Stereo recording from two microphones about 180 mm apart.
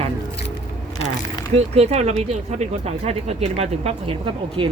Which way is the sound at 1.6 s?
35° right (ahead or behind).